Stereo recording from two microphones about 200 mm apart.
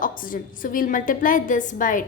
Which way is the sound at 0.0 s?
45° left (ahead or behind).